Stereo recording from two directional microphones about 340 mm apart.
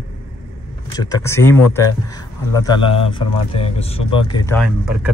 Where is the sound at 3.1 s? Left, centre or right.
Centre.